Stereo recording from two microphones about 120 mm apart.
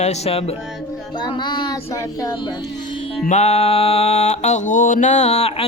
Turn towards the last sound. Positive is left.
turn(degrees=60)  # may be behind; listen again after turning